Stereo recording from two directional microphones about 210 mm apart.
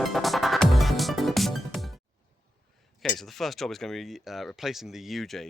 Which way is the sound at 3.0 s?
Centre (ahead or behind).